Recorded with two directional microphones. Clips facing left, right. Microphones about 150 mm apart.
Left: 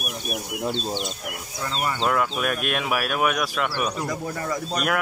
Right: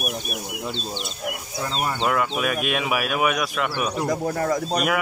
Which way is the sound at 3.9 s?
50° right (ahead or behind).